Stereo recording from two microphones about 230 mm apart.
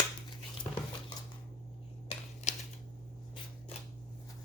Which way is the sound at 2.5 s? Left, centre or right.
Left.